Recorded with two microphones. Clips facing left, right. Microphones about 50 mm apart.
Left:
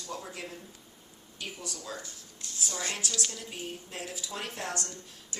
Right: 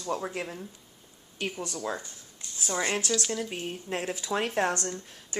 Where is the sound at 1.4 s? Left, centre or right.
Right.